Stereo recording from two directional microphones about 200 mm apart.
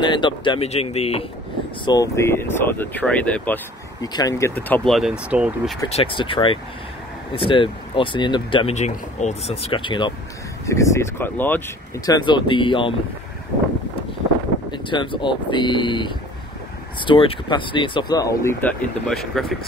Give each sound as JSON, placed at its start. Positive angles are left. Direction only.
{"t": 0.0, "sound": "speech", "side_deg": 25}
{"t": 1.9, "sound": "speech", "side_deg": 15}
{"t": 5.9, "sound": "speech", "side_deg": 30}
{"t": 12.1, "sound": "speech", "side_deg": 20}
{"t": 14.7, "sound": "speech", "side_deg": 25}